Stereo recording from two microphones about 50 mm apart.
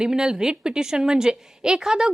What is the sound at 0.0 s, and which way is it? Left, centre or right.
A woman's voice, centre.